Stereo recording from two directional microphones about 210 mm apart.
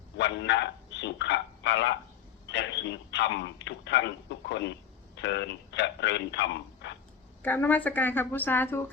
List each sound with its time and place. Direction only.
0.2 s speech: 55° left (ahead or behind)
7.4 s a woman's voice: 10° left (ahead or behind)